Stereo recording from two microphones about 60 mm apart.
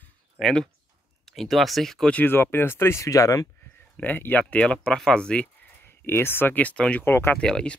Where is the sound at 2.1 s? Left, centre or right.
Left.